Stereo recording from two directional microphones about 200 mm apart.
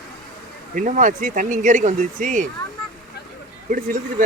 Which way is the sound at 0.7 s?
40° right (ahead or behind).